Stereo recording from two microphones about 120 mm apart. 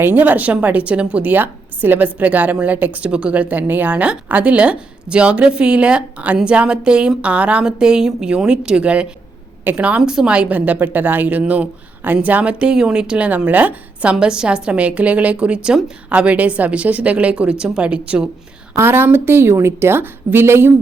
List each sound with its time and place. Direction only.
0.0 s a woman's voice: 15° right (ahead or behind)